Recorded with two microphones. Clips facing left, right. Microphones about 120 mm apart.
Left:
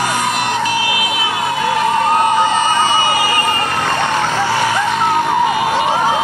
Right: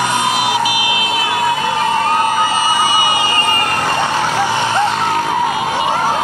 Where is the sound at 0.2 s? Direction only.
5° right (ahead or behind); by 1.1 s 20° right (ahead or behind).